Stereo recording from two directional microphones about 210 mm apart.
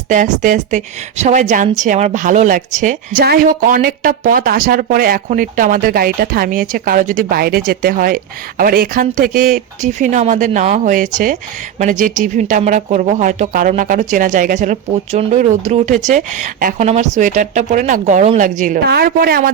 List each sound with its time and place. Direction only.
0.1 s speech: 35° right (ahead or behind)